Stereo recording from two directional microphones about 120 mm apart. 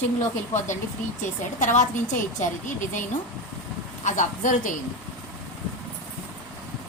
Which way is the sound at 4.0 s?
90° left.